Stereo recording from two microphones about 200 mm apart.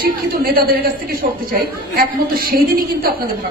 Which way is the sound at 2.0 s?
45° right (ahead or behind).